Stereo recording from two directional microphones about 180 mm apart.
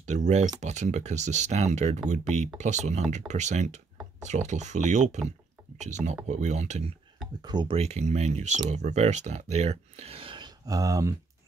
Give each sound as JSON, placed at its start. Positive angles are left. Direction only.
{"t": 0.0, "sound": "speech", "side_deg": -40}
{"t": 7.4, "sound": "speech", "side_deg": -25}